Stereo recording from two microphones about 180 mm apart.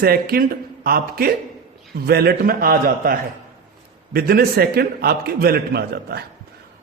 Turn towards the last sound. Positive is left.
turn(degrees=-60)  # may be behind; listen again after turning